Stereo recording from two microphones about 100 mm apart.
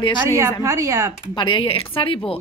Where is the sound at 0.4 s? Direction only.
35° right (ahead or behind).